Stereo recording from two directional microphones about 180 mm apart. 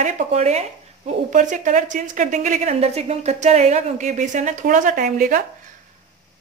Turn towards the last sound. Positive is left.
turn(degrees=-50)  # may be behind; listen again after turning